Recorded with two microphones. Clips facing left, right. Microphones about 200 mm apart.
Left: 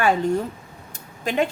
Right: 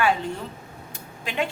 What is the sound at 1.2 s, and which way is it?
Speech, 45° left (ahead or behind).